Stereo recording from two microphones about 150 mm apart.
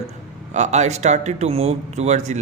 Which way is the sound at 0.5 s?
50° right (ahead or behind).